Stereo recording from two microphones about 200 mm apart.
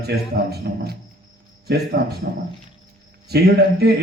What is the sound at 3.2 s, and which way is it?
Mantra, 55° right (ahead or behind).